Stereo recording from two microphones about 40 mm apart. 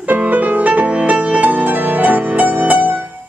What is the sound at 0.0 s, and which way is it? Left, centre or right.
Music, right.